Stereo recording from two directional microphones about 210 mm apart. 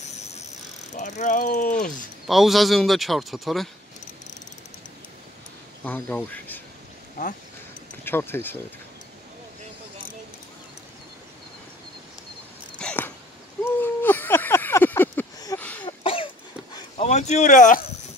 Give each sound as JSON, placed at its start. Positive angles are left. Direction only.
{"t": 0.9, "sound": "mechanisms", "side_deg": 35}
{"t": 2.2, "sound": "speech", "side_deg": 0}
{"t": 5.9, "sound": "speech", "side_deg": 5}
{"t": 8.0, "sound": "speech", "side_deg": 10}
{"t": 12.7, "sound": "a sound", "side_deg": 5}
{"t": 15.8, "sound": "cough", "side_deg": 25}
{"t": 16.7, "sound": "a sound", "side_deg": 30}